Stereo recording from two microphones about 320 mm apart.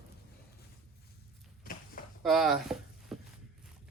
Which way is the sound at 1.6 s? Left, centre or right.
Left.